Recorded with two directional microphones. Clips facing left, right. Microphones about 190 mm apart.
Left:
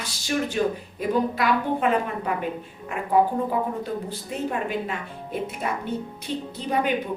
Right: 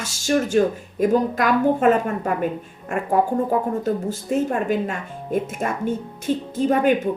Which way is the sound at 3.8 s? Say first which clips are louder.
Right 6 dB; 45° right (ahead or behind).